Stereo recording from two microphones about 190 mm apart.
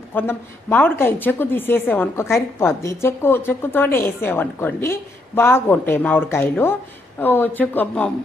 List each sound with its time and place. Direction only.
0.1 s a woman's voice: 10° left (ahead or behind)